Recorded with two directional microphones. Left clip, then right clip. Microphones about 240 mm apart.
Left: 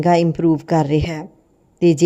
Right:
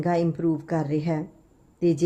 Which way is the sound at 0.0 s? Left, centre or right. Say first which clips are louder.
Left 9 dB; left.